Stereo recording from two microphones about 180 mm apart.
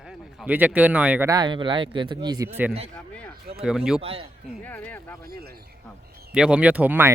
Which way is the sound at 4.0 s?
30° right (ahead or behind).